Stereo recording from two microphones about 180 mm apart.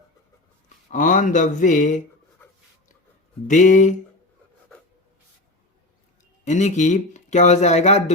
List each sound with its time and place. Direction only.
0.9 s speech: 45° left (ahead or behind)
3.4 s speech: 45° left (ahead or behind)
6.4 s speech: 40° left (ahead or behind)